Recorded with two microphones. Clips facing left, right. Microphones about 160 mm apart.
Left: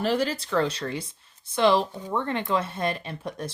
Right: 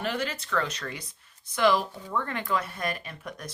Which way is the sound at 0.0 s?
35° left (ahead or behind).